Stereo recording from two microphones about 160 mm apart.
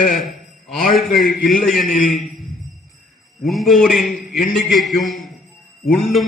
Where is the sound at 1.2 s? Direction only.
60° left (ahead or behind).